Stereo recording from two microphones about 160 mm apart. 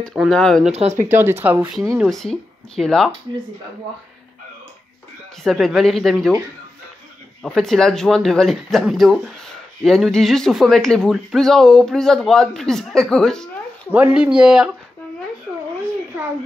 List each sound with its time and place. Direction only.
0.3 s speech: 5° left (ahead or behind)
0.7 s speech: 40° right (ahead or behind)
1.0 s speech: 15° right (ahead or behind)
2.0 s speech: centre (ahead or behind)
5.4 s speech: centre (ahead or behind)
7.4 s speech: 5° left (ahead or behind)
13.9 s speech: 10° right (ahead or behind)